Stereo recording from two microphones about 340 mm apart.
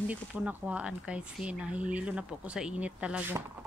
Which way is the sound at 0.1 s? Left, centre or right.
Centre.